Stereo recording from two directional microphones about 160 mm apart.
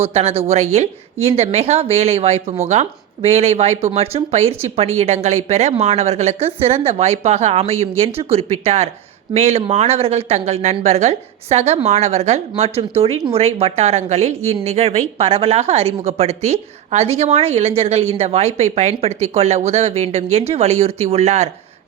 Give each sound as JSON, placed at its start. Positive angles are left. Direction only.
{"t": 0.0, "sound": "a woman's voice", "side_deg": -40}